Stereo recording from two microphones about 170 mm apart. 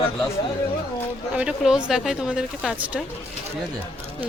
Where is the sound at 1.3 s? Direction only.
5° right (ahead or behind).